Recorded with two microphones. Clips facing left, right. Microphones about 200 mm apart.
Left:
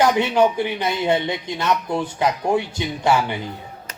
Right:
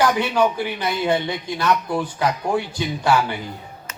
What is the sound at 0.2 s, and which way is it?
Speech, 20° left (ahead or behind).